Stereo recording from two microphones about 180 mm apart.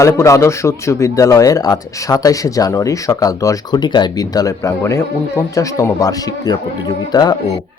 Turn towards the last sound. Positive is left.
turn(degrees=20)  # may be behind; listen again after turning